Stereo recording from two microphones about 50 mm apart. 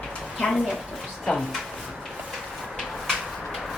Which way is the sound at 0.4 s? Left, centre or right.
Centre.